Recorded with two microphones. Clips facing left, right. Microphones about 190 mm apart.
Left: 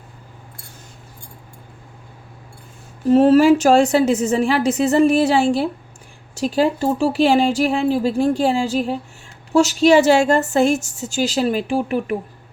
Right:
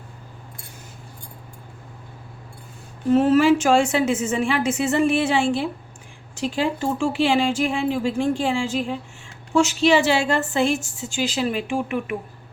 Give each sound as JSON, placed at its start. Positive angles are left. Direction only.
{"t": 3.1, "sound": "a woman's voice", "side_deg": 35}